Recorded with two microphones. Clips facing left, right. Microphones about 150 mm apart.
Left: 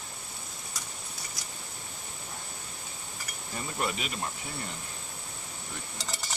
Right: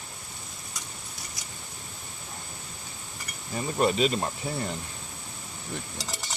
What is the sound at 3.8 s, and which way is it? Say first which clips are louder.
Speech: right 10 dB; 30° right (ahead or behind).